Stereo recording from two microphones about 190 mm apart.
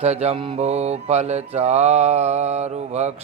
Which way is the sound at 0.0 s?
35° right (ahead or behind).